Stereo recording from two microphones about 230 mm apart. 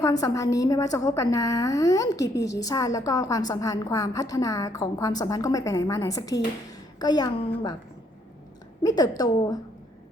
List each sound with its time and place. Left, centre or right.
0.0 s a woman's voice: centre
8.8 s a woman's voice: centre